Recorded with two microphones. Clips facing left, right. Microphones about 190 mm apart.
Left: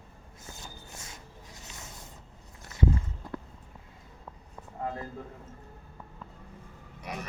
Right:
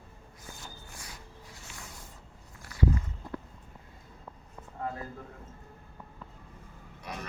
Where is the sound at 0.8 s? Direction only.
25° left (ahead or behind).